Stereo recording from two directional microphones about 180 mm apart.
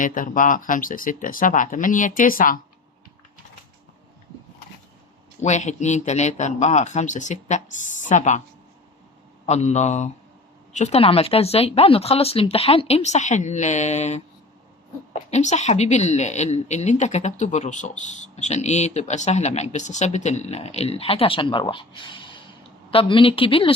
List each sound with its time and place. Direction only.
0.0 s speech: 45° left (ahead or behind)
5.4 s speech: 40° left (ahead or behind)
9.5 s speech: 40° left (ahead or behind)
15.3 s speech: 40° left (ahead or behind)